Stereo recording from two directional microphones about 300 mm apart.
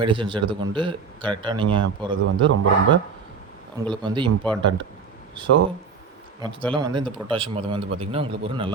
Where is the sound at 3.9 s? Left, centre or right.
Centre.